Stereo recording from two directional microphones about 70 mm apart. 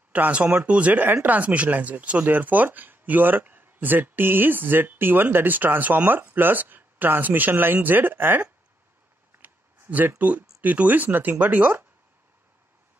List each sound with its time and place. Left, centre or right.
0.1 s speech: right
9.3 s a sound: right
10.6 s speech: right